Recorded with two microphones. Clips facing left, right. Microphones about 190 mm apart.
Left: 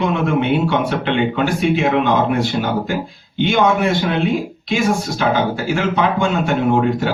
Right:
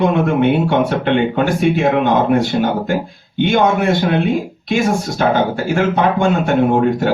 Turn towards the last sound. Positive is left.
turn(degrees=-50)  # may be behind; listen again after turning